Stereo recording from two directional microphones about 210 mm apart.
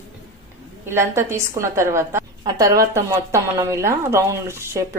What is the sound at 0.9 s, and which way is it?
Speech, 10° right (ahead or behind).